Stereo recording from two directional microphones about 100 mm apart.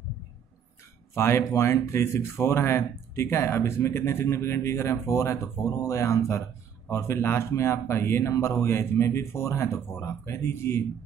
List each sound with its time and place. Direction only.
1.1 s speech: 25° left (ahead or behind)